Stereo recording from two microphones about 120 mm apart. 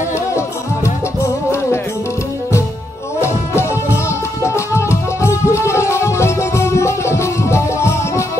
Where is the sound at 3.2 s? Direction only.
20° left (ahead or behind).